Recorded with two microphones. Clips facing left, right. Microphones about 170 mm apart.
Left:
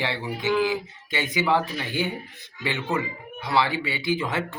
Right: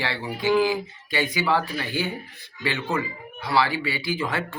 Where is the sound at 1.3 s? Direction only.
20° left (ahead or behind).